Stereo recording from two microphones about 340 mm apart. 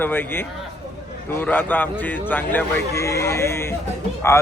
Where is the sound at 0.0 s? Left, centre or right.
Centre.